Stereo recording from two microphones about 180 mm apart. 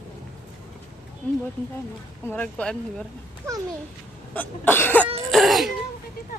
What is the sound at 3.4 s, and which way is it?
Speech, 15° right (ahead or behind).